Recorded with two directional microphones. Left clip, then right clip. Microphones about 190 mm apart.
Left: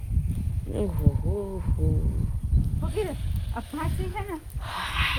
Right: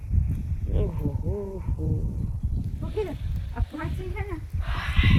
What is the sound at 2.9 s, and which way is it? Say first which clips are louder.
Speech: even; 55° left (ahead or behind).